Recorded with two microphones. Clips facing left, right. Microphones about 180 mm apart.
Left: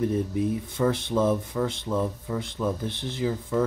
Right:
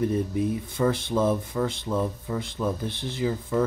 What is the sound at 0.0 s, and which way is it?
Speech, centre (ahead or behind).